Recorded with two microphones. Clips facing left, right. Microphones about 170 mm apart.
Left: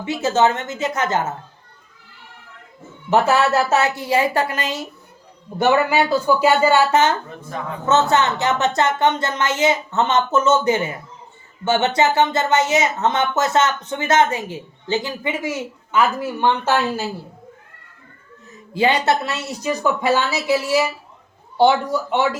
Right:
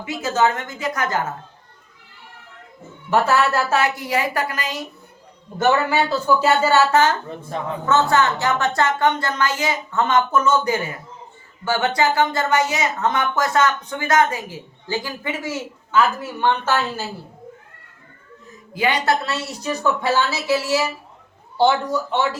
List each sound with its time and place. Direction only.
0.0 s speech: 25° left (ahead or behind)
3.1 s speech: 20° left (ahead or behind)
5.5 s a woman's voice: 15° left (ahead or behind)
18.7 s speech: 25° left (ahead or behind)
22.1 s a woman's voice: 15° left (ahead or behind)